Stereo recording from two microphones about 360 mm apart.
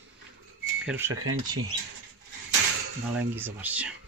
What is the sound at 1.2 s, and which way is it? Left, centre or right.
Speech, right.